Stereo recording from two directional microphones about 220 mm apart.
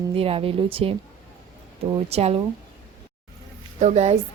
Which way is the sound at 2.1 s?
25° right (ahead or behind).